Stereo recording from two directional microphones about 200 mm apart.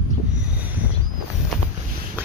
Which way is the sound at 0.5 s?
10° right (ahead or behind).